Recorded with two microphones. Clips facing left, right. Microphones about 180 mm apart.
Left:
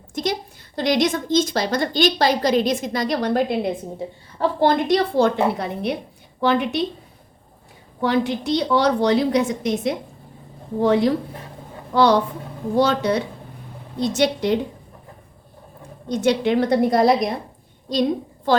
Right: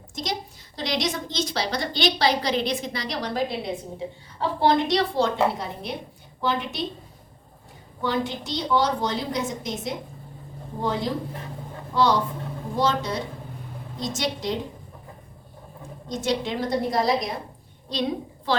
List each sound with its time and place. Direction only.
0.1 s a sound: 55° left (ahead or behind)
0.8 s a woman's voice: 55° left (ahead or behind)
8.0 s a woman's voice: 65° left (ahead or behind)
16.0 s a woman's voice: 60° left (ahead or behind)